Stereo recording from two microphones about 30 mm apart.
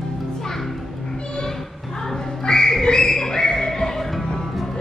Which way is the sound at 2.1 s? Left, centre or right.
Left.